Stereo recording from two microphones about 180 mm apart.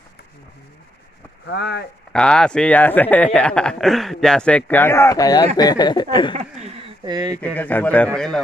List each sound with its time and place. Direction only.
1.5 s speech: 65° left (ahead or behind)
2.1 s speech: 5° left (ahead or behind); by 6.3 s 25° left (ahead or behind)
7.1 s speech: 20° right (ahead or behind)
7.3 s a man's voice: 10° left (ahead or behind)